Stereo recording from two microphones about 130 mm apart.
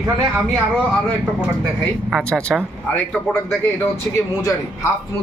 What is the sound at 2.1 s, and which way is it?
Speech, 5° left (ahead or behind).